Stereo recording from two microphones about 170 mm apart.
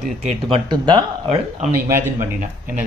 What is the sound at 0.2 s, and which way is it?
Speech, 40° right (ahead or behind).